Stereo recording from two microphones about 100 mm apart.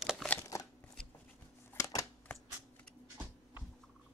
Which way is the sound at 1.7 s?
35° left (ahead or behind).